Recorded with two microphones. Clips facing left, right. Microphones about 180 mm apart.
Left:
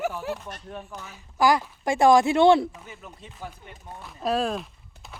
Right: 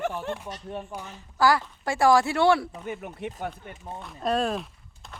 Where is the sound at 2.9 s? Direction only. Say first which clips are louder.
Right 10 dB; 65° right (ahead or behind).